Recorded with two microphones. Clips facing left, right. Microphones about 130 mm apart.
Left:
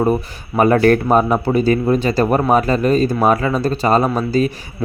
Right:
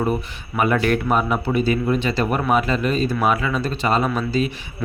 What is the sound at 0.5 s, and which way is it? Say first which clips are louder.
Speech: left 7 dB; 40° left (ahead or behind).